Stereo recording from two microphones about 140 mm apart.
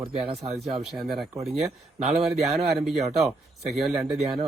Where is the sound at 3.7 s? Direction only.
Centre (ahead or behind).